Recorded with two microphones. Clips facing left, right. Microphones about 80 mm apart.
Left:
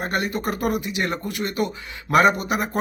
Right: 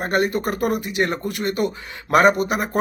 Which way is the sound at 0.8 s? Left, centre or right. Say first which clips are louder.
Right 3 dB; right.